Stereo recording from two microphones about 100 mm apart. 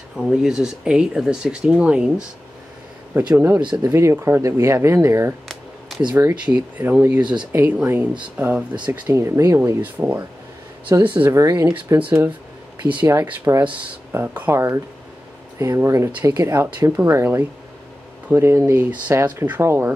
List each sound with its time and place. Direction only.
0.1 s speech: 5° right (ahead or behind)
3.8 s speech: 30° right (ahead or behind)
6.1 s speech: 15° right (ahead or behind)
9.1 s speech: 30° right (ahead or behind)
9.8 s speech: 15° right (ahead or behind)
11.3 s speech: 35° right (ahead or behind)
12.0 s speech: 15° right (ahead or behind); by 16.5 s 35° right (ahead or behind)
16.5 s speech: 20° right (ahead or behind)